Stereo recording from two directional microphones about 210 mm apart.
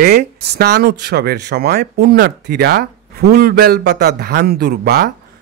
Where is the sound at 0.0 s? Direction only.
50° right (ahead or behind).